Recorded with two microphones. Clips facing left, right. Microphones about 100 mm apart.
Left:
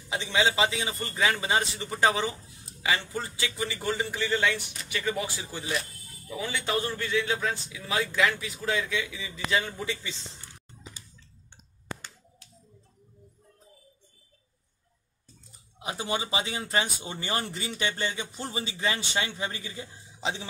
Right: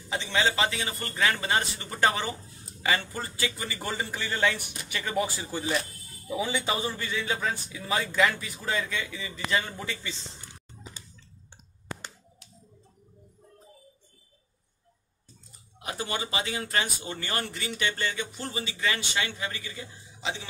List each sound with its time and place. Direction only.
0.1 s a man's voice: 5° left (ahead or behind)
6.2 s a man's voice: 10° right (ahead or behind)
15.8 s speech: 15° left (ahead or behind); by 20.4 s 35° left (ahead or behind)